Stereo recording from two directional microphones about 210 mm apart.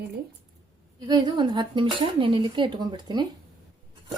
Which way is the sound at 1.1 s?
20° right (ahead or behind).